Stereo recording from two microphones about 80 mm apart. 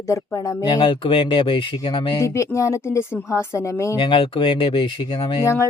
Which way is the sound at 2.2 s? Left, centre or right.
Left.